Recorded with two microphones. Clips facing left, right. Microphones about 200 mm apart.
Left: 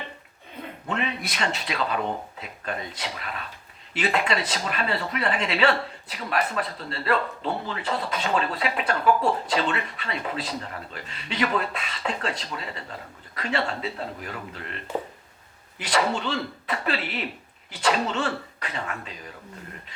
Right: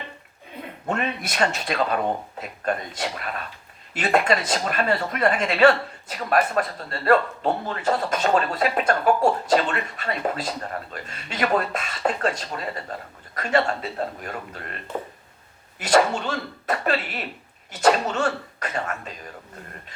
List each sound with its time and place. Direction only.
0.9 s speech: 45° right (ahead or behind)
15.8 s speech: 45° right (ahead or behind)